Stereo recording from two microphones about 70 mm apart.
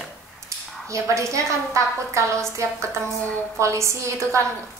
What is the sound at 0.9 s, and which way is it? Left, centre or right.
A woman's voice, right.